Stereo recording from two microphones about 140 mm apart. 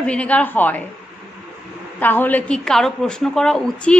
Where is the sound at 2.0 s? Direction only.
15° left (ahead or behind).